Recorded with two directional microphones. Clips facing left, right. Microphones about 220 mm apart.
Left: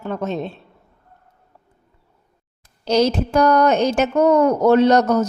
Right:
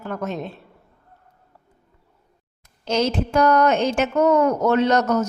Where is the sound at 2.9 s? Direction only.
35° left (ahead or behind).